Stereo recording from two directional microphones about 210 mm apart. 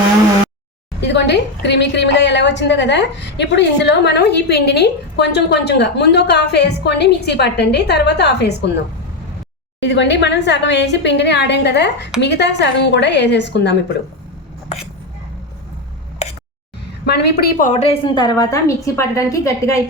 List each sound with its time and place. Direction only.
1.0 s a woman's voice: 55° left (ahead or behind)
9.8 s a woman's voice: 55° left (ahead or behind)
17.1 s a woman's voice: 50° left (ahead or behind); by 19.8 s 15° left (ahead or behind)